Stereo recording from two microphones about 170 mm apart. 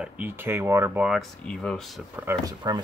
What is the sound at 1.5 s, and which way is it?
Speech, 5° left (ahead or behind).